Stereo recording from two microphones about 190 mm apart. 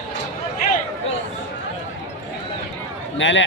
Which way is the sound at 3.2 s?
75° left (ahead or behind).